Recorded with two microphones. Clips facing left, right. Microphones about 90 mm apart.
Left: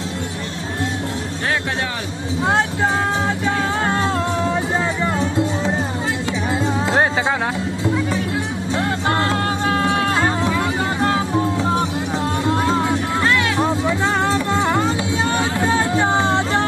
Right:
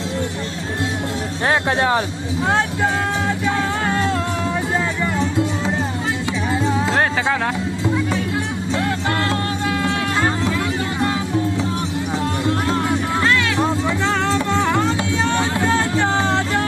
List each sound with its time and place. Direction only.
1.5 s speech: 30° right (ahead or behind)
2.5 s speech: 25° left (ahead or behind)
3.8 s music: 25° left (ahead or behind)
6.9 s music: 15° left (ahead or behind)
8.8 s music: 25° left (ahead or behind)
10.2 s music: 5° left (ahead or behind)
13.2 s music: 20° left (ahead or behind)